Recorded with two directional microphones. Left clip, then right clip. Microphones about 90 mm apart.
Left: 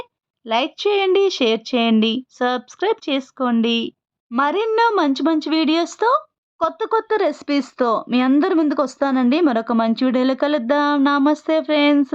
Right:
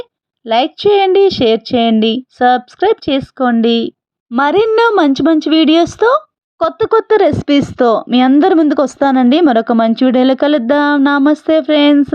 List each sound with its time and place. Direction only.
0.0 s a woman's voice: 25° right (ahead or behind)
3.6 s a sound: 35° right (ahead or behind)
4.4 s speech: 50° right (ahead or behind)